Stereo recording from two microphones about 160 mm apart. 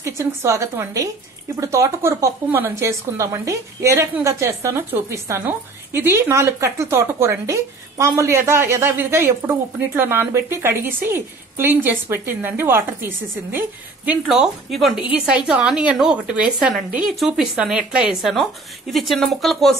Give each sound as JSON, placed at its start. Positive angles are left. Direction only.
{"t": 0.0, "sound": "a woman's voice", "side_deg": -20}
{"t": 14.2, "sound": "a woman's voice", "side_deg": 0}